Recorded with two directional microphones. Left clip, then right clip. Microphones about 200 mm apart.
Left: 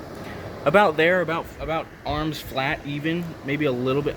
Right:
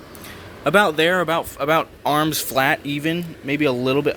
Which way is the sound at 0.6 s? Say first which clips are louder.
Right 1 dB; 35° right (ahead or behind).